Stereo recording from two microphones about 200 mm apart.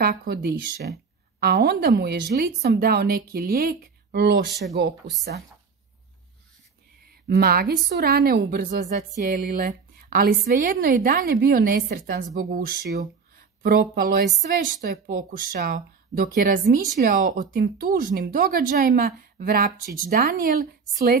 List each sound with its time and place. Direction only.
0.0 s speech: 45° right (ahead or behind)
7.2 s speech: 50° right (ahead or behind)